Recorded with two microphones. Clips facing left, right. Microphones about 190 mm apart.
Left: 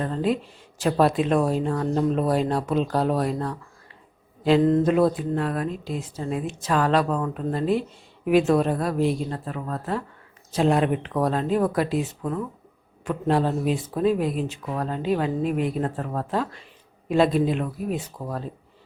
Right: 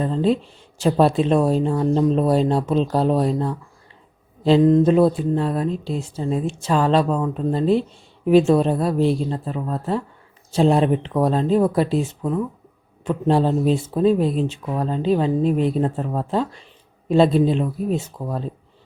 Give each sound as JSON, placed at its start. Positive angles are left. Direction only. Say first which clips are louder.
{"t": 0.0, "sound": "speech", "louder": "right 5 dB", "side_deg": -25}
{"t": 4.6, "sound": "mantra", "louder": "right 5 dB", "side_deg": -15}
{"t": 4.9, "sound": "speech", "louder": "right 4 dB", "side_deg": -30}
{"t": 13.1, "sound": "speech", "louder": "right 4 dB", "side_deg": -30}